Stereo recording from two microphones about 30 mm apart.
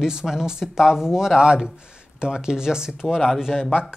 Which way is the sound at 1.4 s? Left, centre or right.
Right.